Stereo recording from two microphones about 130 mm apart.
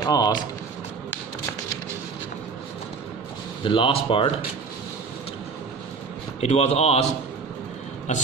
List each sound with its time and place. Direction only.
0.0 s speech: 30° left (ahead or behind)
3.6 s speech: 40° left (ahead or behind)
6.4 s speech: 55° left (ahead or behind)
8.1 s speech: 60° left (ahead or behind)